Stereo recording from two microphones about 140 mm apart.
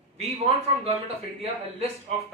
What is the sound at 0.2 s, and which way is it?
A man's voice, 45° right (ahead or behind).